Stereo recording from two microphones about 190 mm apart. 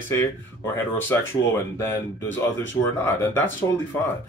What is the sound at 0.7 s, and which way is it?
Speech, 10° left (ahead or behind).